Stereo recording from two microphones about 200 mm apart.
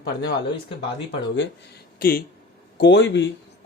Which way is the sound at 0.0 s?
60° left (ahead or behind).